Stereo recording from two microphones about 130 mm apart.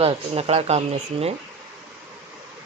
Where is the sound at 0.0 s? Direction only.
50° right (ahead or behind).